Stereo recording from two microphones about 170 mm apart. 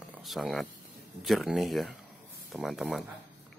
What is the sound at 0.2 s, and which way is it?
Speech, centre (ahead or behind).